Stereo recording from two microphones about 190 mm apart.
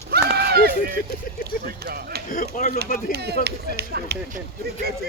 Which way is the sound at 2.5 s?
50° left (ahead or behind).